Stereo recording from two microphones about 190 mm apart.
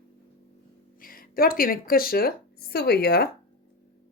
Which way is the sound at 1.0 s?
50° left (ahead or behind).